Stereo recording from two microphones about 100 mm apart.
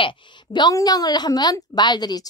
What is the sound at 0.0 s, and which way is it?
Speech, 50° left (ahead or behind).